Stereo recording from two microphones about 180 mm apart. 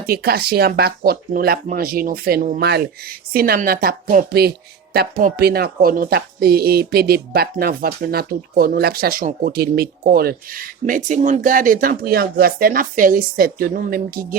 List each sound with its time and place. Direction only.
0.0 s speech: 60° right (ahead or behind)
4.3 s speech: 60° right (ahead or behind)